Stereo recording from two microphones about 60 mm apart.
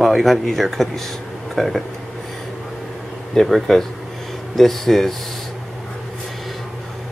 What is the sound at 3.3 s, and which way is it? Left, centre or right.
Speech, centre.